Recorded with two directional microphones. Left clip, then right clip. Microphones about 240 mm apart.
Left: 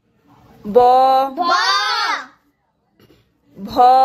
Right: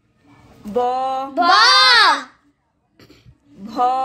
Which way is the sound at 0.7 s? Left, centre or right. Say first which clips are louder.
Left 9 dB; left.